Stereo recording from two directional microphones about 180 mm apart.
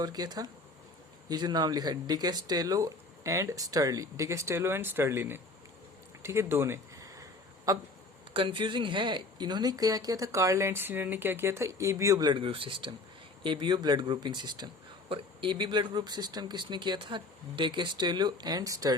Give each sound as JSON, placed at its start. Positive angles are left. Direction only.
{"t": 0.0, "sound": "speech", "side_deg": -20}
{"t": 6.2, "sound": "a sound", "side_deg": -15}
{"t": 8.3, "sound": "speech", "side_deg": -30}